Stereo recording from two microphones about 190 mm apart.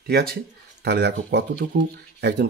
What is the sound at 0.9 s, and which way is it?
Speech, 60° right (ahead or behind).